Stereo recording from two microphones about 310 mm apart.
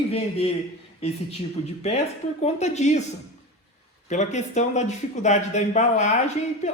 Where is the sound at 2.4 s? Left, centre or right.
Left.